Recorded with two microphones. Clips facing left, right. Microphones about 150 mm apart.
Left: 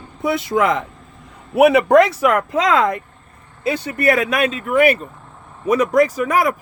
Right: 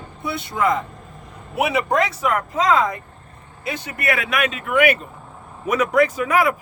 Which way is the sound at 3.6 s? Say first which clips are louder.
Left 7 dB; 35° left (ahead or behind).